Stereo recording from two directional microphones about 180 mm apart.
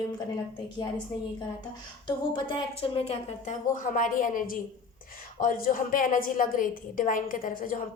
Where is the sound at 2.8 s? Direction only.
30° left (ahead or behind); by 7.8 s 50° left (ahead or behind).